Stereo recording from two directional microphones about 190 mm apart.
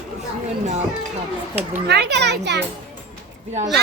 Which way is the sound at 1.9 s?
60° right (ahead or behind).